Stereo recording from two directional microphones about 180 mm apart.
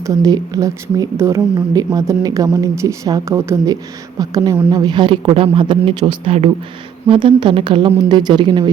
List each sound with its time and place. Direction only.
0.0 s a woman's voice: 20° right (ahead or behind)